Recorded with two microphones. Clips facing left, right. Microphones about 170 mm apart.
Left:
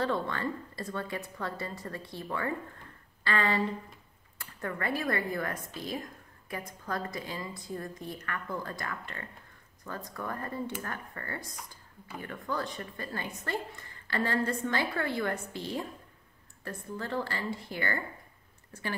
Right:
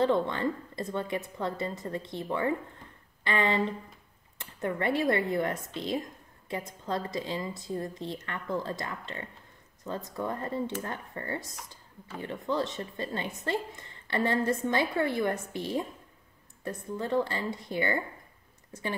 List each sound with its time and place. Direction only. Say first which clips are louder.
0.0 s speech: right 5 dB; 20° right (ahead or behind)